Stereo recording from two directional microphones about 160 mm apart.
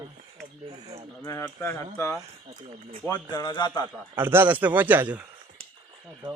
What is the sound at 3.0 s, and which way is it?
Speech, 25° left (ahead or behind).